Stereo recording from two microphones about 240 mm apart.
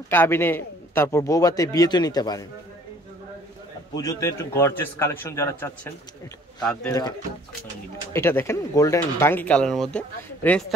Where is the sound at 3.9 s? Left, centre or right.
Centre.